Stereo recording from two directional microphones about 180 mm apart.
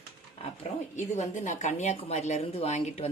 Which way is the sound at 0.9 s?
40° left (ahead or behind).